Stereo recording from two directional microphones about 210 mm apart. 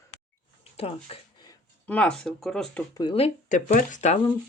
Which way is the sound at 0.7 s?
30° left (ahead or behind).